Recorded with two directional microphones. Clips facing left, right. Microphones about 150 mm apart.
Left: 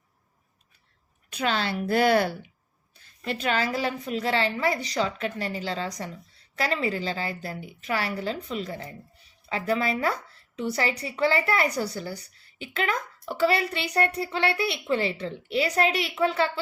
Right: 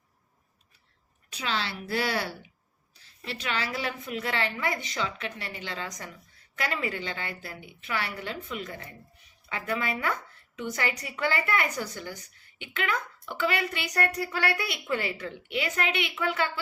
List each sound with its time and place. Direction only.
1.3 s a woman's voice: 50° left (ahead or behind); by 16.5 s 30° left (ahead or behind)